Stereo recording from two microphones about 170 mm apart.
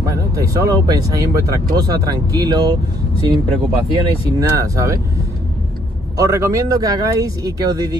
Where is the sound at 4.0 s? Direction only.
20° right (ahead or behind).